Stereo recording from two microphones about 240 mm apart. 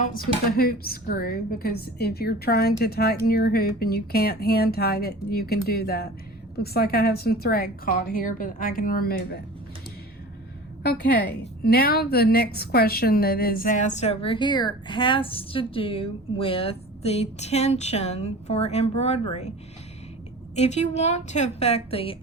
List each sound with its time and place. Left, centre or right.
0.0 s a woman's voice: left
10.8 s a woman's voice: left
20.6 s a woman's voice: left